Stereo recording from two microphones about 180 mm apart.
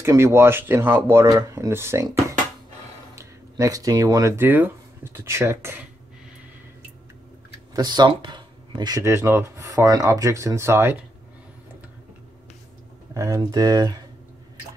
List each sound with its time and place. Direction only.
0.0 s speech: 15° right (ahead or behind)
3.2 s speech: 20° right (ahead or behind)
7.7 s speech: 25° right (ahead or behind)
13.1 s speech: 15° right (ahead or behind)